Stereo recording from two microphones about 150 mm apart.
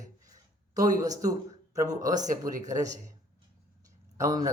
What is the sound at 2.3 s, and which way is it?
Speech, 60° right (ahead or behind).